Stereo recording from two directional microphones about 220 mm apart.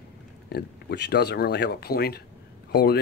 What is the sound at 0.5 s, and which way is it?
Speech, 50° left (ahead or behind).